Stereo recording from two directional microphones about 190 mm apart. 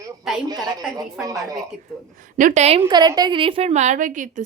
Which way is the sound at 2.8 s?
20° right (ahead or behind).